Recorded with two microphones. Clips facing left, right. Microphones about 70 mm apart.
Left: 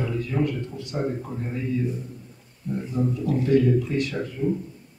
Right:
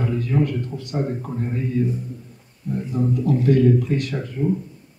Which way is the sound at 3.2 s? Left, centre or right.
Right.